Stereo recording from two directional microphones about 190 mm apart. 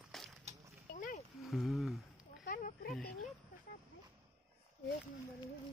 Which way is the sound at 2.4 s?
45° left (ahead or behind).